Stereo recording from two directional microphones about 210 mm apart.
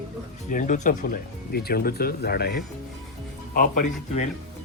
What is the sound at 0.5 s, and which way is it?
Speech, 40° left (ahead or behind).